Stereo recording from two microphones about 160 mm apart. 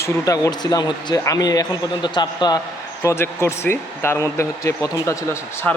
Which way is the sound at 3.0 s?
15° left (ahead or behind).